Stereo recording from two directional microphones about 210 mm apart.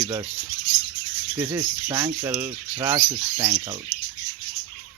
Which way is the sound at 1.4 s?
20° right (ahead or behind).